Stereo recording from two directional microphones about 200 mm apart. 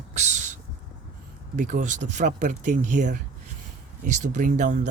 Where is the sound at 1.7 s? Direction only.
40° right (ahead or behind).